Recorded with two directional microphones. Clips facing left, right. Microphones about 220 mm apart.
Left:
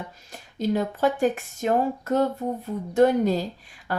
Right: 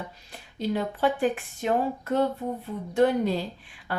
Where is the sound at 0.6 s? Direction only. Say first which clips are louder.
Left 3 dB; 45° left (ahead or behind).